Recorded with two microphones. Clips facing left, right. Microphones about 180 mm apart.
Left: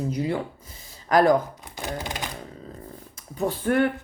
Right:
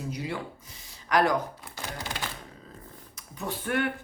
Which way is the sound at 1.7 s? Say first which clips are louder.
Left 7 dB; 15° left (ahead or behind).